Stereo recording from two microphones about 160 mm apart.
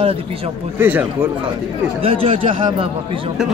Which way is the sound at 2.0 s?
35° right (ahead or behind).